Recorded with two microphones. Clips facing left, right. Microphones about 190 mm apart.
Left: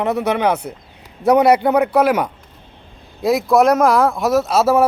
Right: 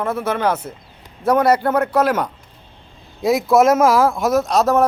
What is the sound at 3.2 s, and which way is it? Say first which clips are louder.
Speech: even; centre (ahead or behind).